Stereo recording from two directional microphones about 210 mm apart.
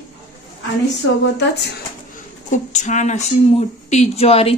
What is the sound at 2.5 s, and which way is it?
A woman's voice, 35° left (ahead or behind).